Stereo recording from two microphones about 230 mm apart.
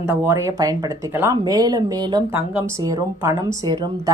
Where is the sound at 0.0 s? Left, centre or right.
Centre.